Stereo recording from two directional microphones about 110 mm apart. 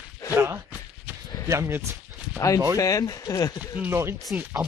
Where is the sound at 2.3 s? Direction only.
30° left (ahead or behind).